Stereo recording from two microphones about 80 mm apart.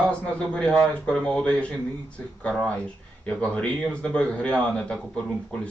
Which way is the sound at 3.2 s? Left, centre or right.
Centre.